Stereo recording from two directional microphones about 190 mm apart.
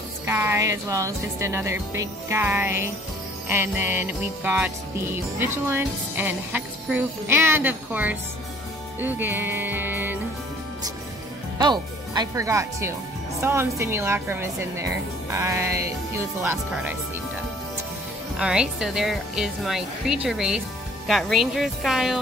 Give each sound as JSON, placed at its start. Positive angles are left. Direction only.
{"t": 0.3, "sound": "jingle bell", "side_deg": -10}
{"t": 9.0, "sound": "music", "side_deg": -10}
{"t": 11.5, "sound": "speech", "side_deg": -20}
{"t": 13.4, "sound": "jingle bell", "side_deg": -15}
{"t": 18.4, "sound": "speech", "side_deg": -5}